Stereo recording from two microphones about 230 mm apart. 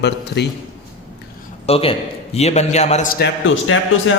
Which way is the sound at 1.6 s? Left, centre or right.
Left.